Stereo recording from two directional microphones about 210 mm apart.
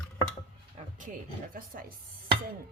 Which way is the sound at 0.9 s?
40° right (ahead or behind).